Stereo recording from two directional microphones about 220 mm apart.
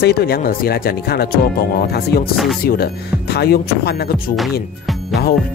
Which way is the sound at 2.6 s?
45° left (ahead or behind).